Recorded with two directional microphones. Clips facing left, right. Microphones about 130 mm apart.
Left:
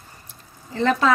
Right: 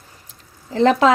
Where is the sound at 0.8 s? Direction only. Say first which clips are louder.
Right 6 dB; 90° right.